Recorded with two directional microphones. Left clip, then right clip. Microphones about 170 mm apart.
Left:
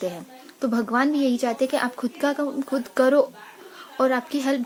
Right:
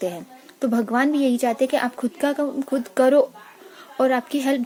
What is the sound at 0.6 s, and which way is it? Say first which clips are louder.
A woman's voice: right 1 dB; 25° right (ahead or behind).